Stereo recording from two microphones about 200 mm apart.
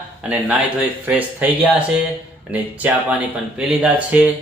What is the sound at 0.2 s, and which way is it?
Speech, 5° right (ahead or behind).